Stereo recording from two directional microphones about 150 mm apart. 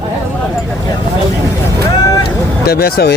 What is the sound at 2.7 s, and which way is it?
Speech, 90° left.